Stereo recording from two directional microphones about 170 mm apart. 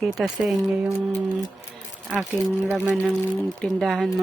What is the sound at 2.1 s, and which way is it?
Speech, 10° right (ahead or behind).